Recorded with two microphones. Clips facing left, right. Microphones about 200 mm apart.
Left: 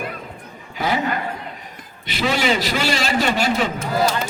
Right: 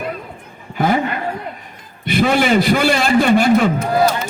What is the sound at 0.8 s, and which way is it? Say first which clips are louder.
Speech: right 5 dB; 50° right (ahead or behind).